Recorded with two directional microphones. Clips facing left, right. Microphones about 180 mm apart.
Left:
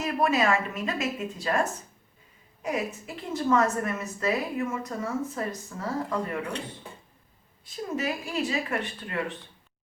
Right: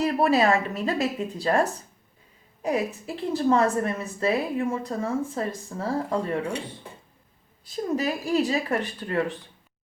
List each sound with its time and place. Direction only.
0.0 s a woman's voice: 35° right (ahead or behind)
7.6 s speech: 35° right (ahead or behind)